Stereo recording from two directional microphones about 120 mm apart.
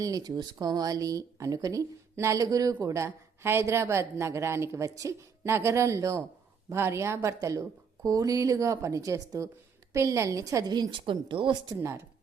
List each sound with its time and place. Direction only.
0.0 s a woman's voice: 30° right (ahead or behind)
11.7 s speech: 25° right (ahead or behind)